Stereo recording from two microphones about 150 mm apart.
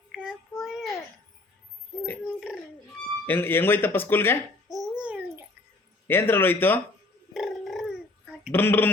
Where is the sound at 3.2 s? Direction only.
15° left (ahead or behind).